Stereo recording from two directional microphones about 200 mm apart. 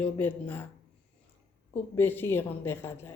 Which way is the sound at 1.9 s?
10° left (ahead or behind).